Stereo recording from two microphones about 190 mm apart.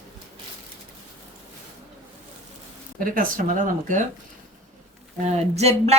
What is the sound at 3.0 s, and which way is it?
Speech, 45° right (ahead or behind).